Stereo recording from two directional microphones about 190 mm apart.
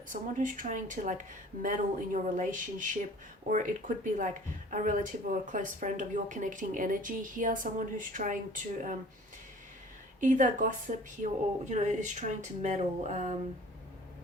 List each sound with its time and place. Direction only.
0.1 s speech: 45° right (ahead or behind)
10.2 s speech: 40° right (ahead or behind)